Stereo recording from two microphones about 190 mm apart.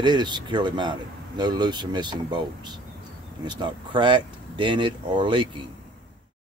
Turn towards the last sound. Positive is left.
turn(degrees=-25)  # may be behind; listen again after turning